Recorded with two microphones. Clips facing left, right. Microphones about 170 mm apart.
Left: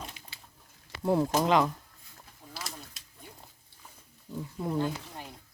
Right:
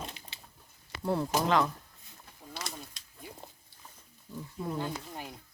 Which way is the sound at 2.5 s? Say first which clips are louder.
Right 1 dB; centre (ahead or behind).